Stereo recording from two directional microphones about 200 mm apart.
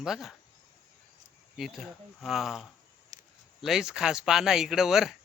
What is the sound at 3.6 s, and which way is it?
Speech, centre (ahead or behind).